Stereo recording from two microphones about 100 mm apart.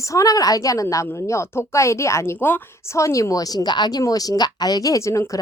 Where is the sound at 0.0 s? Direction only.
35° left (ahead or behind).